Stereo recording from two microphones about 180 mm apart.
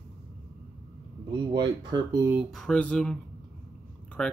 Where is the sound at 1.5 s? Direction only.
20° right (ahead or behind).